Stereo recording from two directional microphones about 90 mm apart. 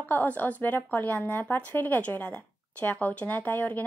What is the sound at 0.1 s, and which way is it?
Speech, 20° left (ahead or behind).